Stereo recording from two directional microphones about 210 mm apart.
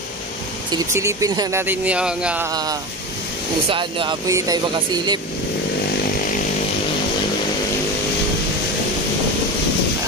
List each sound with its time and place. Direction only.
0.7 s speech: 15° right (ahead or behind)
2.5 s speech: 20° right (ahead or behind)